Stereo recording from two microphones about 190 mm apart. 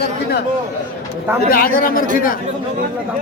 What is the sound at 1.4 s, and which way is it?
Speech, 50° left (ahead or behind).